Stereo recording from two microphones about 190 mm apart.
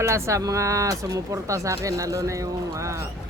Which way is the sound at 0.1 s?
15° right (ahead or behind).